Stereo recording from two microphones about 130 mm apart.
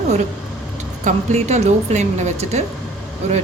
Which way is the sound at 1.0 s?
60° right (ahead or behind).